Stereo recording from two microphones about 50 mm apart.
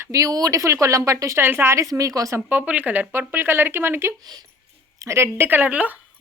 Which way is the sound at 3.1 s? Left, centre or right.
Right.